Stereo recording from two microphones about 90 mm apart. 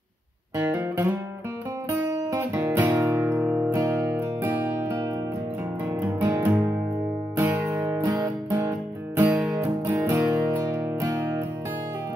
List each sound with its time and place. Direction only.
0.6 s music: 25° right (ahead or behind)
1.9 s guitar: 30° right (ahead or behind)
3.4 s music: 15° right (ahead or behind)
3.7 s music: 35° right (ahead or behind)
5.9 s guitar: 25° right (ahead or behind)
7.3 s music: 25° right (ahead or behind)
9.6 s music: 25° right (ahead or behind)